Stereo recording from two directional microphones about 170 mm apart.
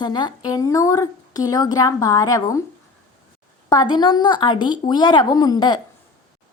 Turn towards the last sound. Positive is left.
turn(degrees=25)  # may be behind; listen again after turning